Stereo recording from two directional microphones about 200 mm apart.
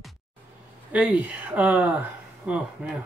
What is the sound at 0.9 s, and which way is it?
Speech, 5° right (ahead or behind).